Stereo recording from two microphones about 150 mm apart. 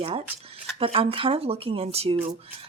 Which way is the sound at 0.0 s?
40° right (ahead or behind).